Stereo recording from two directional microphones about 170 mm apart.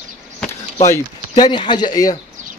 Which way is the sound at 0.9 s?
25° left (ahead or behind).